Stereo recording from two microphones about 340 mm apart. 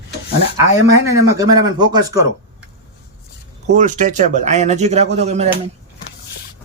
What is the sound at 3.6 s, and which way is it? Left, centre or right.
Speech, right.